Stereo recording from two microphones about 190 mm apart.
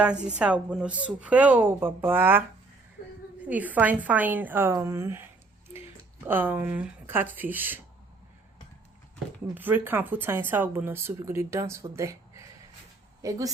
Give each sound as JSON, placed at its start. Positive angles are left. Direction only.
{"t": 0.0, "sound": "speech", "side_deg": -5}
{"t": 3.4, "sound": "speech", "side_deg": -10}
{"t": 6.2, "sound": "speech", "side_deg": -10}
{"t": 9.6, "sound": "speech", "side_deg": -10}